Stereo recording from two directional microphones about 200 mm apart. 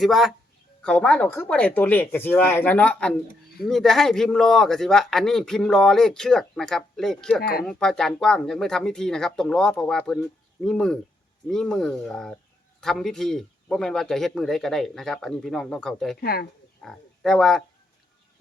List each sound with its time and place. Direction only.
0.0 s speech: centre (ahead or behind)
16.2 s speech: 50° left (ahead or behind)
16.8 s speech: 5° left (ahead or behind)